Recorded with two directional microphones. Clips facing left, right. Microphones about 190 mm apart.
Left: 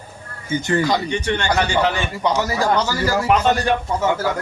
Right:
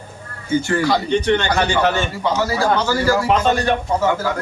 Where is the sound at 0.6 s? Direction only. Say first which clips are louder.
Right 1 dB; 20° left (ahead or behind).